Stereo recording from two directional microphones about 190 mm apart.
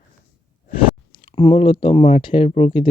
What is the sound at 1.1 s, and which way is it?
Speech, 30° left (ahead or behind).